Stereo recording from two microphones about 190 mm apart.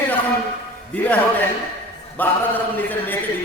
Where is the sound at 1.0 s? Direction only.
10° left (ahead or behind).